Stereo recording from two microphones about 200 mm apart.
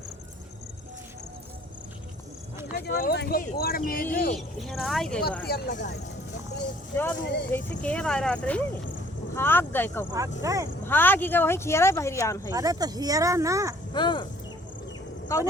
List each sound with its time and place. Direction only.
2.7 s speech: 50° left (ahead or behind)
4.4 s speech: centre (ahead or behind)
5.5 s speech: 50° left (ahead or behind)
6.9 s speech: 10° left (ahead or behind)
10.4 s speech: 15° right (ahead or behind)
10.8 s speech: 10° left (ahead or behind)
12.5 s speech: 15° right (ahead or behind)
13.9 s cricket: 25° left (ahead or behind)